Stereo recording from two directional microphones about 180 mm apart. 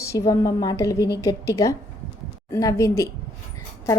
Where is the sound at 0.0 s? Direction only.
15° left (ahead or behind).